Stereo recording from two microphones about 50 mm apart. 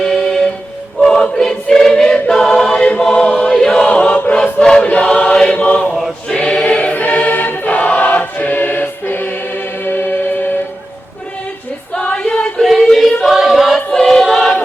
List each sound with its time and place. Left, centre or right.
0.0 s music: centre
1.0 s choir: centre
2.1 s choir: left
2.4 s choir: centre
4.8 s choir: left
5.1 s chant: centre
6.2 s choir: centre
6.9 s choir: left
11.9 s choir: left
12.6 s singing: centre
13.3 s choir: centre
13.7 s choir: centre